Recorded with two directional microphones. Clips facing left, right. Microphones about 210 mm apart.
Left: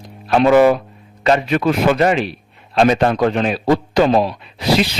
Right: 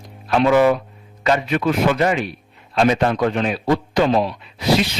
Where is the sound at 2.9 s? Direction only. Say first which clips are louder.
Left 3 dB; 40° left (ahead or behind).